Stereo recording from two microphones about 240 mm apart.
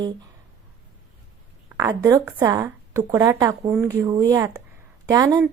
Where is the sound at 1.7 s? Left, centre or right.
Centre.